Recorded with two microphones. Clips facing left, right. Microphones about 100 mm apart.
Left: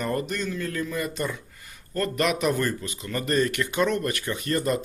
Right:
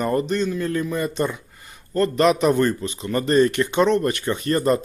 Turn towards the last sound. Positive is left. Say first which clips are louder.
# right 6 dB
turn(degrees=-35)  # may be behind; listen again after turning